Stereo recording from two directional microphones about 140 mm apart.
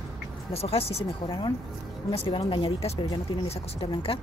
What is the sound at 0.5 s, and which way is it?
Speech, 45° left (ahead or behind).